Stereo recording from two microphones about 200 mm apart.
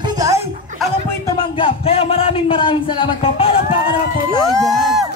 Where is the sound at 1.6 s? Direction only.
30° left (ahead or behind).